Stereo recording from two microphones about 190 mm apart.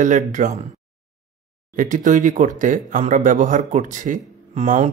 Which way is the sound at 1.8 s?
45° right (ahead or behind).